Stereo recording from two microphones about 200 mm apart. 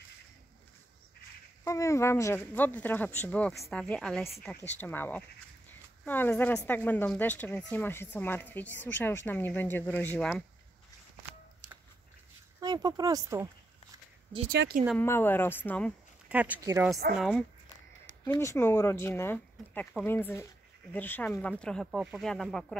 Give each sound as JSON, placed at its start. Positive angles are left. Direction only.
{"t": 1.6, "sound": "a woman's voice", "side_deg": 15}
{"t": 12.5, "sound": "speech", "side_deg": -20}
{"t": 14.5, "sound": "speech", "side_deg": -50}
{"t": 15.0, "sound": "a woman's voice", "side_deg": 10}
{"t": 16.3, "sound": "speech", "side_deg": -10}
{"t": 17.2, "sound": "a woman's voice", "side_deg": 5}